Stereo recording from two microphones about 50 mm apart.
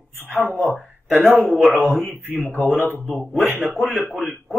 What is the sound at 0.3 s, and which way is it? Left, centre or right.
Speech, left.